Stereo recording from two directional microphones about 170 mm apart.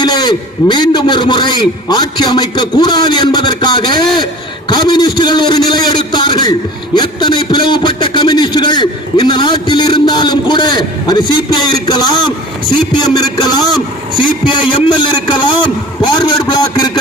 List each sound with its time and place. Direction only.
0.0 s a man's voice: 25° left (ahead or behind)